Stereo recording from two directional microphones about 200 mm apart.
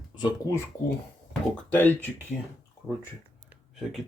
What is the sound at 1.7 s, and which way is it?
Speech, 10° left (ahead or behind).